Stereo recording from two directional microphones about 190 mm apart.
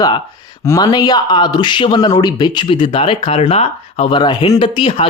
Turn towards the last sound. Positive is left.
turn(degrees=30)  # may be behind; listen again after turning